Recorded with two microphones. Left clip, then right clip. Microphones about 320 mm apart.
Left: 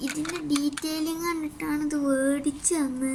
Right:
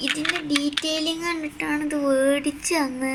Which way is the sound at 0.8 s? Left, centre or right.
Centre.